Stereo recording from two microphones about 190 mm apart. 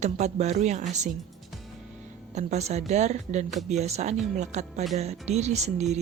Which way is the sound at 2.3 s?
35° right (ahead or behind).